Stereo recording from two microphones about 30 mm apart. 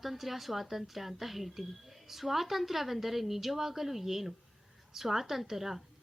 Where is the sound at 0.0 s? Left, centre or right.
Centre.